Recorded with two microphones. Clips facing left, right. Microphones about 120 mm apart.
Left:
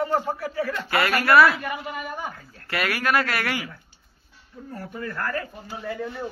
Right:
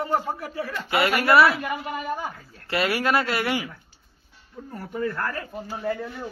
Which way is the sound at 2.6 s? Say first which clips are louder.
Right 2 dB; 25° right (ahead or behind).